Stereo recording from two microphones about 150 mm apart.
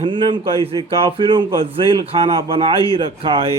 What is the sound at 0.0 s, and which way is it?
A man's voice, 35° right (ahead or behind).